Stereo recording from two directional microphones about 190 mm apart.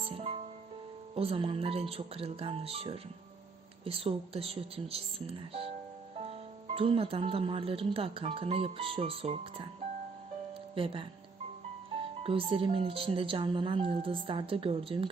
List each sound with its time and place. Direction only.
0.0 s music: 30° right (ahead or behind)
1.1 s speech: 30° right (ahead or behind)
6.7 s speech: 30° right (ahead or behind)
10.8 s speech: 30° right (ahead or behind)
12.2 s speech: 30° right (ahead or behind)